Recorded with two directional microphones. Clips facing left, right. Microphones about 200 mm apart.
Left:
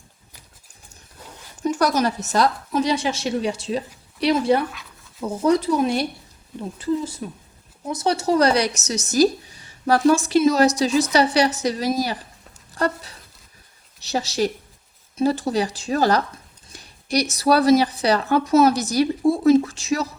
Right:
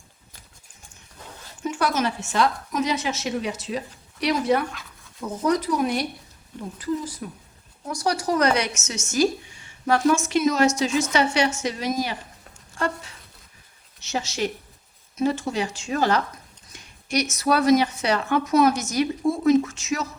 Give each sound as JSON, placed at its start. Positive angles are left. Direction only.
{"t": 1.5, "sound": "speech", "side_deg": 40}